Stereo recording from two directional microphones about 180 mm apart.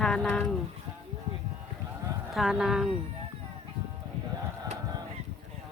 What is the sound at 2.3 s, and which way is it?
Speech, 5° right (ahead or behind).